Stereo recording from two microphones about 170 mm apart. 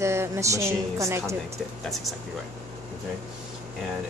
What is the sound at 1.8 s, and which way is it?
Speech, centre (ahead or behind).